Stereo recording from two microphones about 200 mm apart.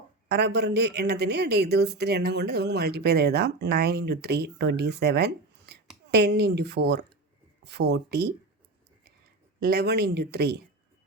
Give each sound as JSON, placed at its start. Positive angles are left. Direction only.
{"t": 0.3, "sound": "speech", "side_deg": -55}
{"t": 9.6, "sound": "speech", "side_deg": -55}